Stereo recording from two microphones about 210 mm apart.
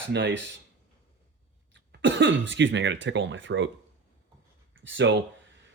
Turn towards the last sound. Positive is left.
turn(degrees=-60)  # may be behind; listen again after turning